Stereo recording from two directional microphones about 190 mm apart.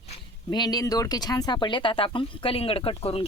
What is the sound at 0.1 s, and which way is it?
Speech, 20° left (ahead or behind).